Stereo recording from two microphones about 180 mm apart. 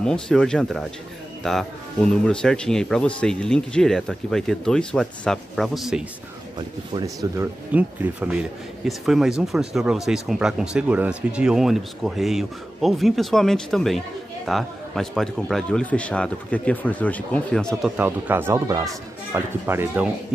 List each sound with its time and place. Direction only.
0.0 s speech: 5° left (ahead or behind)
6.9 s speech: 20° right (ahead or behind)
7.7 s speech: 10° right (ahead or behind)
17.9 s speech: 10° right (ahead or behind)